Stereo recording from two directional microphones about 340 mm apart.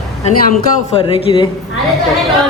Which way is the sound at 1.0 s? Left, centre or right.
Centre.